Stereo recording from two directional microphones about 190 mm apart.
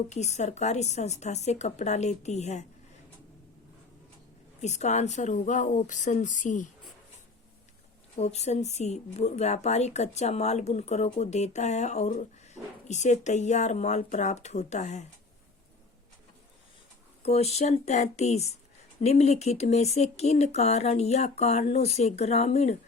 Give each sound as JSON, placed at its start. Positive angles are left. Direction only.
{"t": 0.1, "sound": "speech", "side_deg": 35}
{"t": 4.6, "sound": "speech", "side_deg": 35}
{"t": 8.1, "sound": "speech", "side_deg": 35}
{"t": 12.6, "sound": "speech", "side_deg": 0}
{"t": 12.9, "sound": "speech", "side_deg": 40}
{"t": 17.2, "sound": "speech", "side_deg": 35}